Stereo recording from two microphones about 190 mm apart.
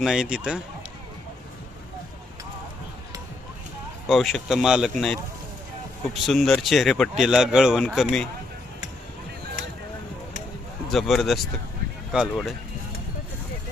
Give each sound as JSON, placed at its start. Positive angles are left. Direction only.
{"t": 0.0, "sound": "speech", "side_deg": -5}
{"t": 4.0, "sound": "speech", "side_deg": 0}
{"t": 10.9, "sound": "speech", "side_deg": 0}